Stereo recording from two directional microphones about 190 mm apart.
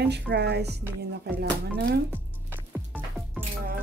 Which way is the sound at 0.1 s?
60° right (ahead or behind).